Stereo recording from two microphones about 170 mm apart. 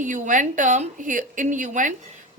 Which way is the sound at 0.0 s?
50° right (ahead or behind).